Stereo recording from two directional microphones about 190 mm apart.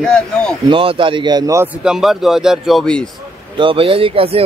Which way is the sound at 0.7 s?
25° right (ahead or behind).